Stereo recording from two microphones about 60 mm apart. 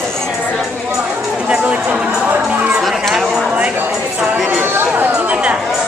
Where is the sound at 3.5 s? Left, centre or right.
Centre.